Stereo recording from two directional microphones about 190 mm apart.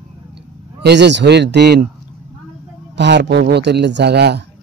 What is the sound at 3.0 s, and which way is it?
Speech, 65° right (ahead or behind).